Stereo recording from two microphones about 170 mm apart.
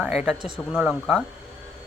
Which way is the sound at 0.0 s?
5° right (ahead or behind).